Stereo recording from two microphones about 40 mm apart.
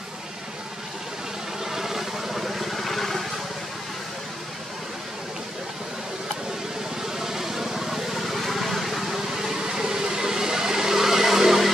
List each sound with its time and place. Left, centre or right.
1.6 s vehicle: centre
7.1 s vehicle: centre